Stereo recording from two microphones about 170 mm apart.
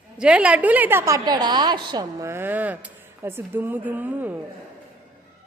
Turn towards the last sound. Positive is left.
turn(degrees=-10)  # may be behind; listen again after turning